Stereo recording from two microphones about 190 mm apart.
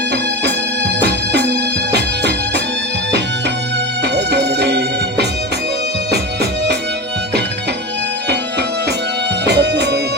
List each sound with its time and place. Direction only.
1.0 s music: 60° right (ahead or behind)
4.1 s music: 60° right (ahead or behind)
9.5 s music: 60° right (ahead or behind)